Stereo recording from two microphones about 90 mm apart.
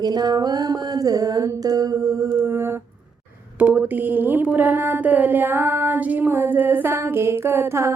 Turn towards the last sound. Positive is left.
turn(degrees=-30)  # may be behind; listen again after turning